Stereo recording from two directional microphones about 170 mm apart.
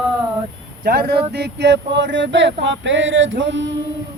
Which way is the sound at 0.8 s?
65° right (ahead or behind).